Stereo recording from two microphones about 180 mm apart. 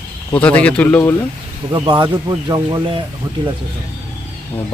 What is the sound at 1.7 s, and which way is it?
Speech, 25° right (ahead or behind).